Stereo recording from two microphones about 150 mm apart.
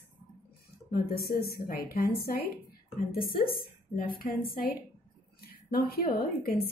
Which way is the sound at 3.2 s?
75° left (ahead or behind).